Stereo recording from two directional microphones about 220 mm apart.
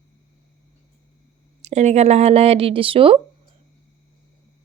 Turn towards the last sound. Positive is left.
turn(degrees=-25)  # may be behind; listen again after turning